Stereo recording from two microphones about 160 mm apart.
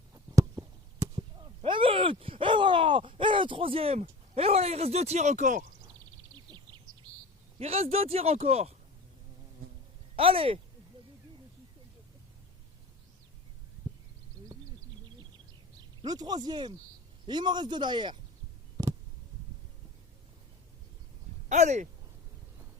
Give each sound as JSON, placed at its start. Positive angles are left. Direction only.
{"t": 0.1, "sound": "a sound", "side_deg": -20}
{"t": 1.1, "sound": "speech", "side_deg": -30}
{"t": 7.6, "sound": "speech", "side_deg": -40}
{"t": 10.2, "sound": "speech", "side_deg": -35}
{"t": 16.0, "sound": "a man's voice", "side_deg": -25}
{"t": 21.5, "sound": "speech", "side_deg": -45}